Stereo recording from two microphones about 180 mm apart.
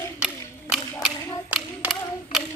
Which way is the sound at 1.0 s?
10° right (ahead or behind).